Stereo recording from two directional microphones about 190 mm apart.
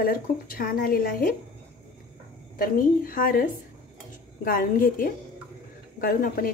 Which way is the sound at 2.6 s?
50° left (ahead or behind).